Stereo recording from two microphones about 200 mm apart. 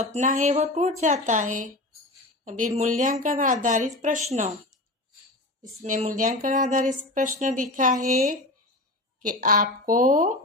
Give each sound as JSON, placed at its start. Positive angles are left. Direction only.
{"t": 0.0, "sound": "speech", "side_deg": -35}
{"t": 5.8, "sound": "speech", "side_deg": -40}